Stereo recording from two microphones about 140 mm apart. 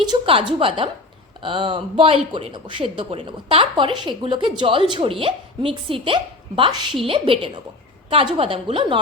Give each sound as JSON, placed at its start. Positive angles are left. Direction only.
{"t": 0.1, "sound": "speech", "side_deg": -40}